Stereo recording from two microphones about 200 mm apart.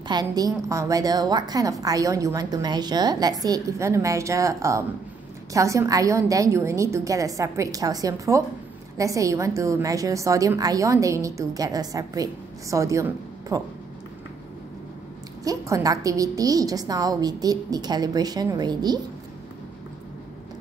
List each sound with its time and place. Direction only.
0.1 s a woman's voice: 20° right (ahead or behind)
15.4 s a woman's voice: 15° right (ahead or behind)